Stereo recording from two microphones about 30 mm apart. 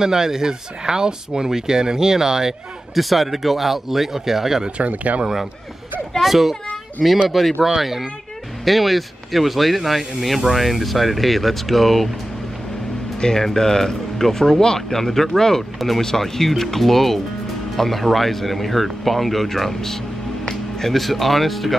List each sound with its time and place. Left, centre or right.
0.0 s speech: centre
3.0 s speech: centre
4.8 s speech: right
6.2 s a child's voice: centre
13.2 s speech: centre
15.0 s speech: centre
20.4 s music: centre
20.9 s speech: centre